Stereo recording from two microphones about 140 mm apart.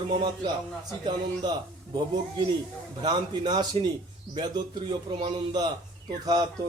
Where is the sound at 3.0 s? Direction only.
30° right (ahead or behind).